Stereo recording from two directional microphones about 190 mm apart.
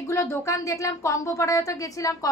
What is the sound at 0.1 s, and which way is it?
A woman's voice, 15° left (ahead or behind).